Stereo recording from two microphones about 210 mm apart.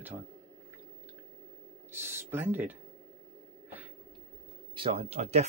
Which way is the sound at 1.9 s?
10° right (ahead or behind).